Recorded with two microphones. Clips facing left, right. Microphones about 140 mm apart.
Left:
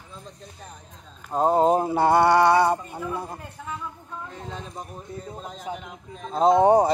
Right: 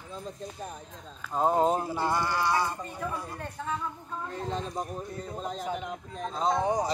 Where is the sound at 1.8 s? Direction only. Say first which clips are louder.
Left 10 dB; 60° left (ahead or behind).